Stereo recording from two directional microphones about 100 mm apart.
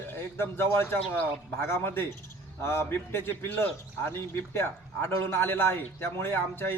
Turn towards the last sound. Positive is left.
turn(degrees=25)  # may be behind; listen again after turning